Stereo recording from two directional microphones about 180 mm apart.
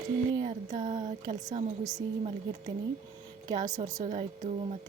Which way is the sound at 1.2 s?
20° right (ahead or behind).